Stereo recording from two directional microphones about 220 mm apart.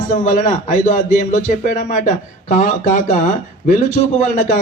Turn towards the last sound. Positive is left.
turn(degrees=35)  # may be behind; listen again after turning